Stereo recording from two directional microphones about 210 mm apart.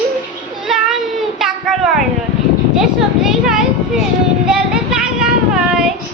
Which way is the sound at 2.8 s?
Centre (ahead or behind).